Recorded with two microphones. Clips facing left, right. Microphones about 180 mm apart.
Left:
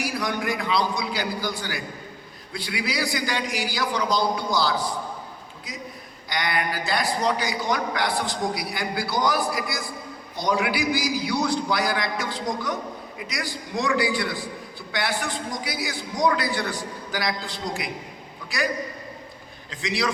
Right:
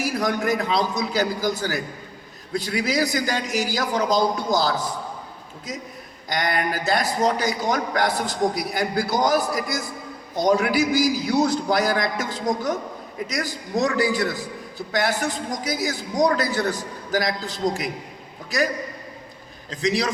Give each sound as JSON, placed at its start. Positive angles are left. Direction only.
{"t": 0.0, "sound": "a man's voice", "side_deg": -45}
{"t": 6.2, "sound": "a man's voice", "side_deg": -45}
{"t": 19.7, "sound": "a man's voice", "side_deg": -40}